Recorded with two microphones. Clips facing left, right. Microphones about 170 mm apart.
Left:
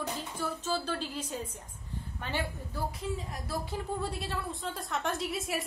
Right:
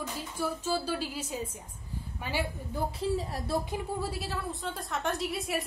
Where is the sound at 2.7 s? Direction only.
30° right (ahead or behind).